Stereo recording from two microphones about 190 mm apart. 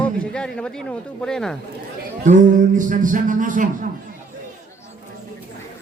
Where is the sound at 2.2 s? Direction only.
40° right (ahead or behind).